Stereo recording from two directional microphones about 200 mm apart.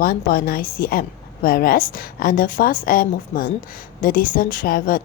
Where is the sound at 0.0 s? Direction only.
45° left (ahead or behind).